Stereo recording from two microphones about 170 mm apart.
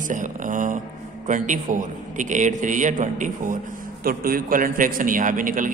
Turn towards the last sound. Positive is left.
turn(degrees=-50)  # may be behind; listen again after turning